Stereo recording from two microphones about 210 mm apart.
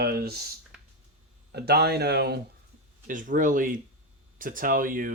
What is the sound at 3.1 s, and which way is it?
Speech, 40° right (ahead or behind).